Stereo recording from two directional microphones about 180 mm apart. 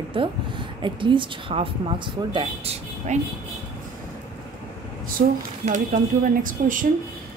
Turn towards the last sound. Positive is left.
turn(degrees=-50)  # may be behind; listen again after turning